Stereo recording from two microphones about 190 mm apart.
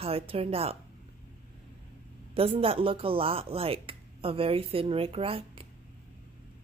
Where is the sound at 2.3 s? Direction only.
30° right (ahead or behind).